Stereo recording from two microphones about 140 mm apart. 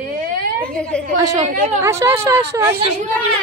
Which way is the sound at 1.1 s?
30° right (ahead or behind).